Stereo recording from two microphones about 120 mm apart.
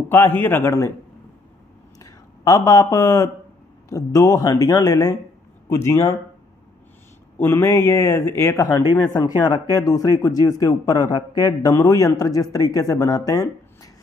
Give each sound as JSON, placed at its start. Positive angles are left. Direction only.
{"t": 0.1, "sound": "speech", "side_deg": 20}
{"t": 2.0, "sound": "a sound", "side_deg": 30}
{"t": 3.9, "sound": "speech", "side_deg": 30}
{"t": 7.3, "sound": "speech", "side_deg": 20}